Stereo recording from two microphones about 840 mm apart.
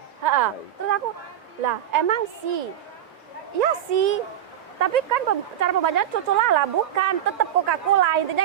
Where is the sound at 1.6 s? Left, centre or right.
Right.